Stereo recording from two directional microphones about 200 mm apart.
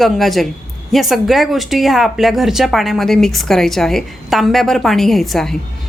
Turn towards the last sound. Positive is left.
turn(degrees=0)  # may be behind; listen again after turning